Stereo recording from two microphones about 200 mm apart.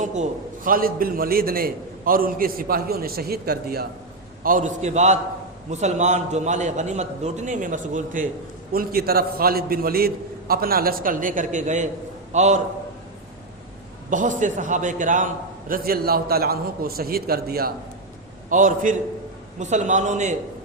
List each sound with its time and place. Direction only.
0.0 s a man's voice: 35° right (ahead or behind)
4.4 s a man's voice: 40° right (ahead or behind)
14.1 s a man's voice: 40° right (ahead or behind)